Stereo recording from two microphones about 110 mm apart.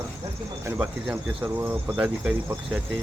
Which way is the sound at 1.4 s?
15° right (ahead or behind).